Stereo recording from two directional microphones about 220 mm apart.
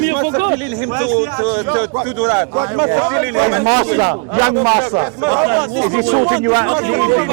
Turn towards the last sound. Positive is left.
turn(degrees=-20)  # may be behind; listen again after turning